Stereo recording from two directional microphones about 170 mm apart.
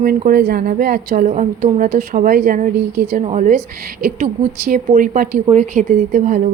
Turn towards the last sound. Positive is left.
turn(degrees=-50)  # may be behind; listen again after turning